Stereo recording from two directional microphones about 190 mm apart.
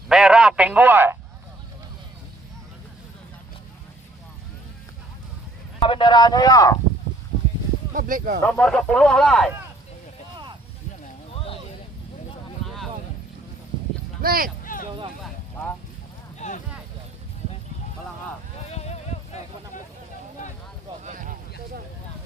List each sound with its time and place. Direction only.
0.1 s a man's voice: 5° right (ahead or behind)
5.8 s speech: 25° left (ahead or behind)
7.9 s speech: 45° right (ahead or behind)
8.4 s speech: 5° left (ahead or behind)
11.3 s clip-clop: 30° left (ahead or behind)
12.6 s a sound: centre (ahead or behind)
14.2 s speech: 50° right (ahead or behind)
14.6 s a sound: 45° left (ahead or behind)
16.4 s speech: 40° left (ahead or behind)
18.7 s clip-clop: 35° left (ahead or behind)
21.0 s a sound: 40° right (ahead or behind)